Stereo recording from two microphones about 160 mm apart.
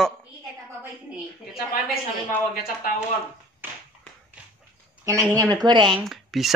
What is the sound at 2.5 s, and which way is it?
Speech, 70° left (ahead or behind).